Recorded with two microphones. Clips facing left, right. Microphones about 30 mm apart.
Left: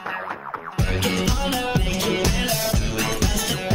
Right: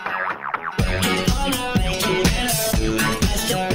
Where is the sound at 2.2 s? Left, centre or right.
Right.